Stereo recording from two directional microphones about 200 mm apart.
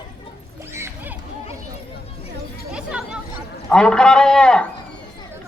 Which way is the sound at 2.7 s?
5° right (ahead or behind).